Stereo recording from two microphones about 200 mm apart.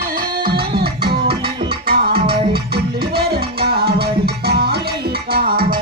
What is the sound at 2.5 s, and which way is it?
Music, 50° right (ahead or behind).